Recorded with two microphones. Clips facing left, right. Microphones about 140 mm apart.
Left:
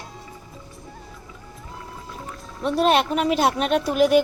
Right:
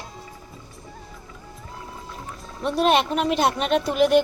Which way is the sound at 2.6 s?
Centre (ahead or behind).